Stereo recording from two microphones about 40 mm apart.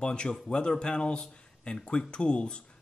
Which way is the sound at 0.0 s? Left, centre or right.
Left.